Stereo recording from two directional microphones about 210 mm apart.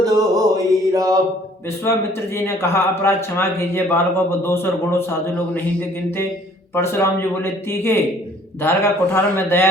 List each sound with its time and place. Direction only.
0.0 s mantra: 15° right (ahead or behind)
1.8 s a man's voice: 10° left (ahead or behind)
6.7 s a man's voice: 10° left (ahead or behind)